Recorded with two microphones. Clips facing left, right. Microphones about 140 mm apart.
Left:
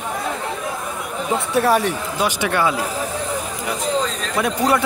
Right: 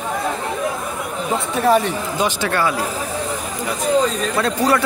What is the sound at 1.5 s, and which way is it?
Speech, 5° left (ahead or behind).